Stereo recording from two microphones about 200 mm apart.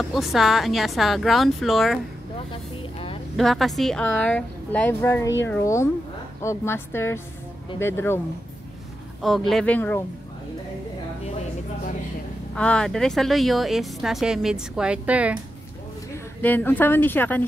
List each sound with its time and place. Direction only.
0.1 s speech: centre (ahead or behind)
2.5 s vehicle: 25° left (ahead or behind)
3.3 s a woman's voice: centre (ahead or behind)
9.2 s speech: centre (ahead or behind)
12.5 s speech: 5° left (ahead or behind)
16.4 s a woman's voice: 10° left (ahead or behind)